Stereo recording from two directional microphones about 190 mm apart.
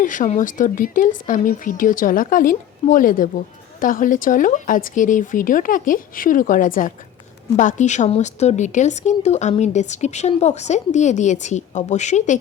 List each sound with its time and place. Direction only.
0.0 s a woman's voice: 45° left (ahead or behind)